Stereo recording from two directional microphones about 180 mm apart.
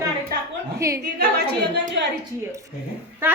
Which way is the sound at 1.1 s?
70° right (ahead or behind).